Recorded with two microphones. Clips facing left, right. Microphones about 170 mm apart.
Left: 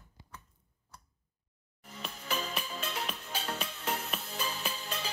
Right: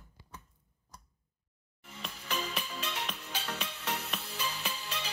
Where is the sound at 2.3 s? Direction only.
35° left (ahead or behind).